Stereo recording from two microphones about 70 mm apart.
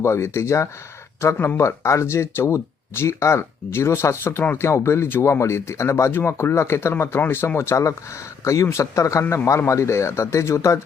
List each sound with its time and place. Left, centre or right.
0.0 s speech: left